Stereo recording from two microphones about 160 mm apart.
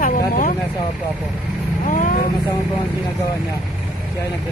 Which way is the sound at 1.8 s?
55° left (ahead or behind).